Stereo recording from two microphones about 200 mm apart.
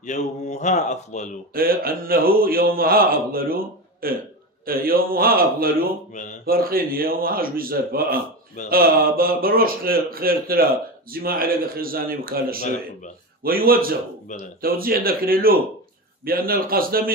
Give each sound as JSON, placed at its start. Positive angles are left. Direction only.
{"t": 0.0, "sound": "a man's voice", "side_deg": 35}
{"t": 1.5, "sound": "speech", "side_deg": -45}